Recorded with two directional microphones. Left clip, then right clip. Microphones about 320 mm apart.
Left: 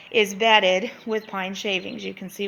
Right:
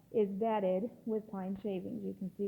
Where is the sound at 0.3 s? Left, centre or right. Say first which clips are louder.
Left 15 dB; centre.